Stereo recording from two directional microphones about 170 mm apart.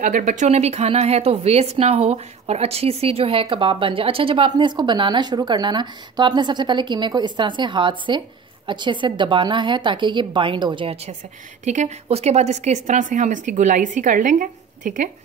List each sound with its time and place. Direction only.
0.0 s a woman's voice: 50° right (ahead or behind); by 11.0 s 30° right (ahead or behind)
11.6 s a woman's voice: 45° right (ahead or behind)